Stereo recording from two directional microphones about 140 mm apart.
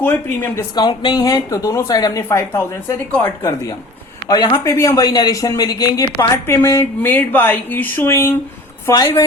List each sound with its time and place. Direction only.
0.0 s speech: 15° left (ahead or behind)
0.8 s speech: 30° left (ahead or behind)
8.9 s speech: 30° left (ahead or behind)